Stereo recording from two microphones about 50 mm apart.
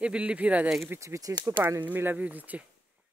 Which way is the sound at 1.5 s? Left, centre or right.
Right.